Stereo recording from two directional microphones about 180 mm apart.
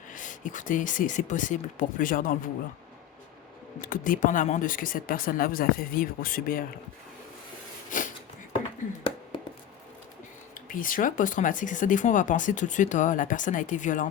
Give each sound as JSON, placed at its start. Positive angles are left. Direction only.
{"t": 0.1, "sound": "speech", "side_deg": 45}
{"t": 3.8, "sound": "speech", "side_deg": 50}
{"t": 7.9, "sound": "a sound", "side_deg": 45}
{"t": 10.5, "sound": "speech", "side_deg": 50}